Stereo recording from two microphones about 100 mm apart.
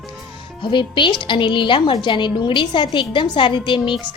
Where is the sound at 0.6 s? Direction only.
55° left (ahead or behind).